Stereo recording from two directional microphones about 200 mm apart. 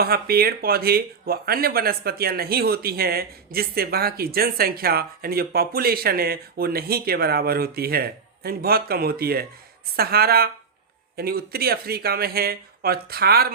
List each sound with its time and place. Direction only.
0.0 s speech: 50° right (ahead or behind)